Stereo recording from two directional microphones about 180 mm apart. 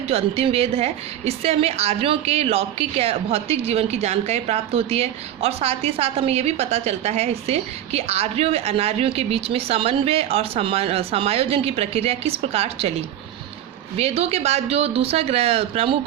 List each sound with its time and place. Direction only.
0.1 s a woman's voice: 35° right (ahead or behind)
13.9 s a woman's voice: 35° right (ahead or behind)